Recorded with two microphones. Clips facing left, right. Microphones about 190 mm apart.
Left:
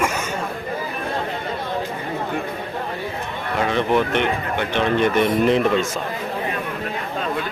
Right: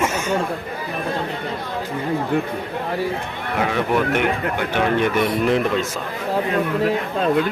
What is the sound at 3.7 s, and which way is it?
Speech, 10° right (ahead or behind).